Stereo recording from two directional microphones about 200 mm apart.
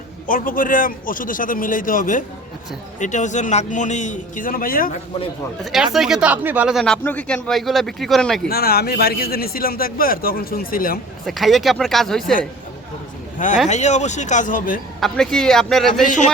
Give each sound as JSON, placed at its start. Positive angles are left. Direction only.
{"t": 0.3, "sound": "a man's voice", "side_deg": 45}
{"t": 5.7, "sound": "speech", "side_deg": 0}
{"t": 8.4, "sound": "speech", "side_deg": 50}
{"t": 11.3, "sound": "speech", "side_deg": 0}
{"t": 13.7, "sound": "a man's voice", "side_deg": 35}
{"t": 15.0, "sound": "speech", "side_deg": 5}